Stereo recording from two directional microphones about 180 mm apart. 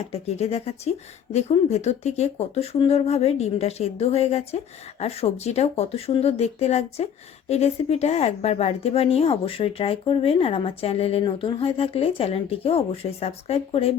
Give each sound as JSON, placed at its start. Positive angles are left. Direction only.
{"t": 0.1, "sound": "speech", "side_deg": 35}